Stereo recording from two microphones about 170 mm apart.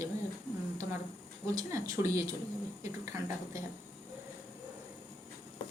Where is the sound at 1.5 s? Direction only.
20° right (ahead or behind).